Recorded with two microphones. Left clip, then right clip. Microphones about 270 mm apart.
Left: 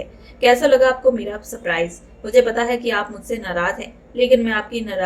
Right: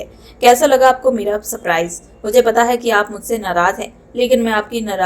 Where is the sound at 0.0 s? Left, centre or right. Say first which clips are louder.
Right 5 dB; centre.